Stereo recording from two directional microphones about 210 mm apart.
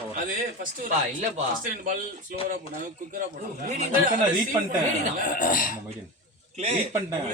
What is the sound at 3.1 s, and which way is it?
Speech, 40° right (ahead or behind).